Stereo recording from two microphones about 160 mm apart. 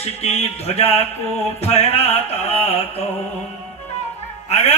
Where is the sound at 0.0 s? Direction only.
40° left (ahead or behind).